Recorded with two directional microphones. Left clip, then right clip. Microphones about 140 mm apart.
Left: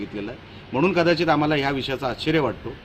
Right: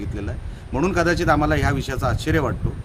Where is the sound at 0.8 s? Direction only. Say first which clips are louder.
Left 1 dB; 25° right (ahead or behind).